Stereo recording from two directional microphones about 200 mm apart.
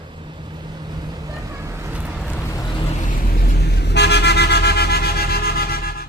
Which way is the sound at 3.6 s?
55° left (ahead or behind).